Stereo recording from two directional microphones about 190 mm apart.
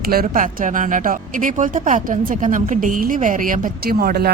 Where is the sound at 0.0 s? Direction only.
50° right (ahead or behind).